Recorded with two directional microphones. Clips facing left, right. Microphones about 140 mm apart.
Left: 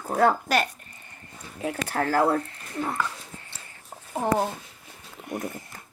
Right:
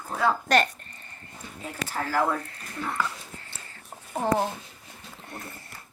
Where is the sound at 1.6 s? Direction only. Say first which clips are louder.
Left 6 dB; 55° left (ahead or behind).